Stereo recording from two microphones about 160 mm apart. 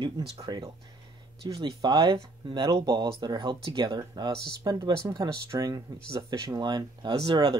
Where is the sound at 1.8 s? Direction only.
25° right (ahead or behind).